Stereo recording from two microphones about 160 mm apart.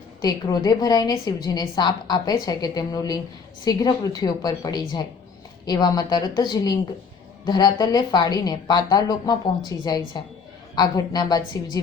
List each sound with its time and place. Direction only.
0.2 s a woman's voice: 25° left (ahead or behind)